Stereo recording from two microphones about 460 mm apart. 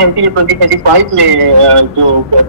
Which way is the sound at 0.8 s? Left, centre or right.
Right.